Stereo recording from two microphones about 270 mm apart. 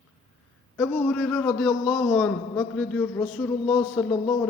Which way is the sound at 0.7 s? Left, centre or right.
Centre.